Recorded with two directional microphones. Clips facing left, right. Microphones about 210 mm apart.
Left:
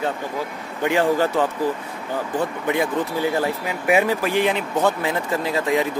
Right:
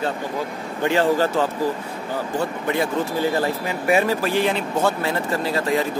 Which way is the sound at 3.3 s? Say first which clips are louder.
Even; 15° left (ahead or behind).